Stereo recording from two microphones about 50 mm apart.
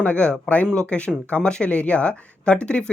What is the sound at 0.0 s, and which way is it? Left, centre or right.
Speech, left.